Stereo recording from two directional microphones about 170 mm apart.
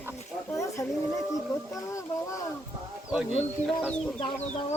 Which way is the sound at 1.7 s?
20° left (ahead or behind).